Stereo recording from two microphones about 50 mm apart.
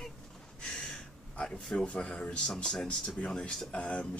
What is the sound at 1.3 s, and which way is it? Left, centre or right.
Speech, left.